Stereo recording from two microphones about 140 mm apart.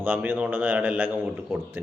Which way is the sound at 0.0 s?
15° right (ahead or behind).